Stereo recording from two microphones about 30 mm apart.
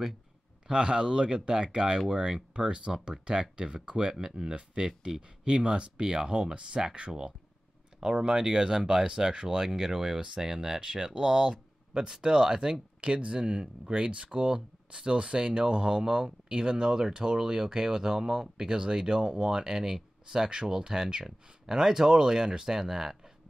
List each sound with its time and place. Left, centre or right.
0.7 s speech: right
2.1 s speech: centre
2.5 s speech: right
4.1 s speech: centre
5.4 s speech: right
9.3 s speech: right
9.6 s speech: right
10.8 s speech: right
13.0 s speech: right; by 18.7 s centre
18.7 s speech: right